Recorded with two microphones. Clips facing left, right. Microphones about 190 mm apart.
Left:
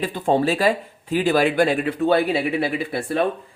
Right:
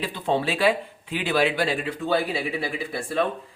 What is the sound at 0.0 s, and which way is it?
Speech, 45° left (ahead or behind).